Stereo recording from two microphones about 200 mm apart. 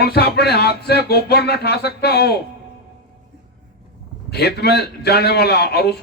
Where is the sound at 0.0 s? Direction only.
55° left (ahead or behind).